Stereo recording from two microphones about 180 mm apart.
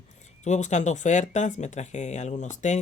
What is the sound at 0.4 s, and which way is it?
Speech, 40° left (ahead or behind).